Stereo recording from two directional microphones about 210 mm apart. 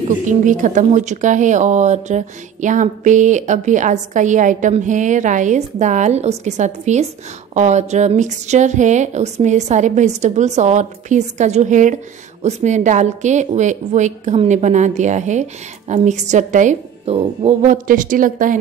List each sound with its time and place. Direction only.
0.3 s speech: 35° right (ahead or behind)